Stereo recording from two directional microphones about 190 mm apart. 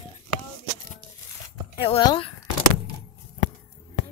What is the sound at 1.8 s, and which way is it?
Speech, 25° left (ahead or behind).